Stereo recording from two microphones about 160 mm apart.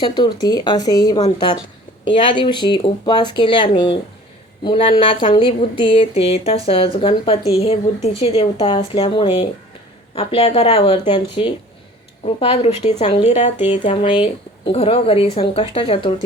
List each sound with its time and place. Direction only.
0.0 s speech: 30° left (ahead or behind); by 13.5 s 45° left (ahead or behind)
13.8 s speech: 35° left (ahead or behind)